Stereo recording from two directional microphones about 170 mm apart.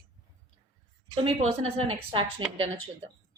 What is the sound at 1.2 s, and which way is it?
Speech, 35° right (ahead or behind).